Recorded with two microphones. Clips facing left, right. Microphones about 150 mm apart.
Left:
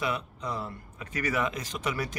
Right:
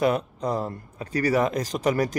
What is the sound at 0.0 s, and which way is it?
Speech, 45° right (ahead or behind).